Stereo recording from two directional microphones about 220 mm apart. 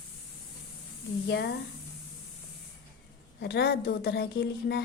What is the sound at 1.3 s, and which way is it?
Speech, 50° left (ahead or behind).